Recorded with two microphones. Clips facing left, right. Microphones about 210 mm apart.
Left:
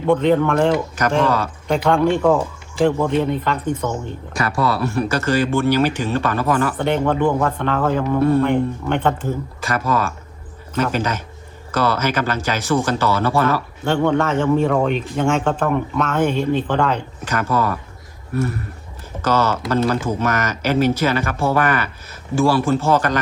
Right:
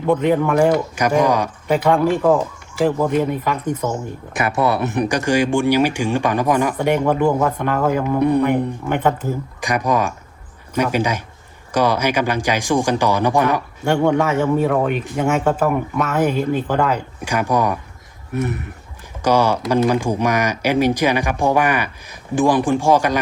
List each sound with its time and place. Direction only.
0.1 s speech: 10° right (ahead or behind)
1.6 s speech: 5° right (ahead or behind)
4.4 s speech: 20° right (ahead or behind)